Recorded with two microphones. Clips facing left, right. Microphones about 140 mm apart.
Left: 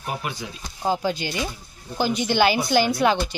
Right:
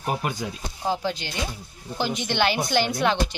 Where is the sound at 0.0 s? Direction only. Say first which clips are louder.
Right 3 dB; 45° right (ahead or behind).